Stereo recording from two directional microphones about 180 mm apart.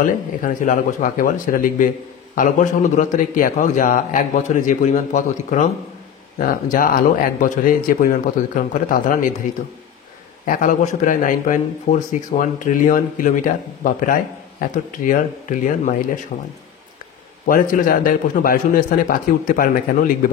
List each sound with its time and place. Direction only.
0.0 s a man's voice: 45° left (ahead or behind)
10.4 s a man's voice: 45° left (ahead or behind)